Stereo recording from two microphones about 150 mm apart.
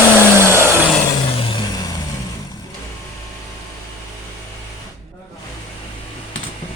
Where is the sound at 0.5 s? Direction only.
15° right (ahead or behind).